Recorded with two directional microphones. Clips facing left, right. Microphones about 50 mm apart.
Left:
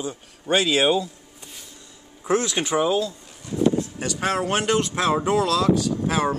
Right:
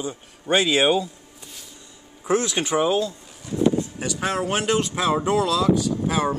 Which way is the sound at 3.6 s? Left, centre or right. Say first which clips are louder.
Even; centre.